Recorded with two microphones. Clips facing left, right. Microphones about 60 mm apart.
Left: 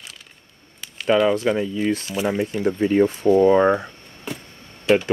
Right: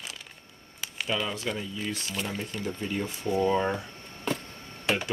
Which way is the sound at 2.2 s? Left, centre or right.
Centre.